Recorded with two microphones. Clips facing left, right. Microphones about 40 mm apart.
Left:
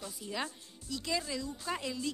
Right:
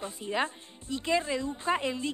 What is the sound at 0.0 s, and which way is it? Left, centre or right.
Speech, right.